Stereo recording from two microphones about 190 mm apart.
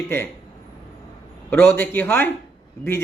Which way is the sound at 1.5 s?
10° left (ahead or behind).